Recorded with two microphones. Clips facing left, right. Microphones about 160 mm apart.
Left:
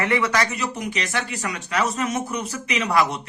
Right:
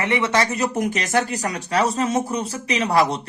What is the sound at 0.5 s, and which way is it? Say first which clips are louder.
A man's voice: right 5 dB; 45° right (ahead or behind).